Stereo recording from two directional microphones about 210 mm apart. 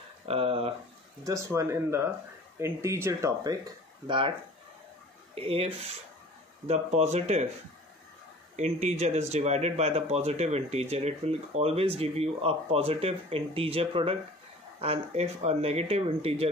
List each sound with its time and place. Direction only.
0.3 s speech: 25° right (ahead or behind)
1.2 s speech: 15° right (ahead or behind)
5.3 s speech: 25° right (ahead or behind)
8.5 s speech: 35° right (ahead or behind)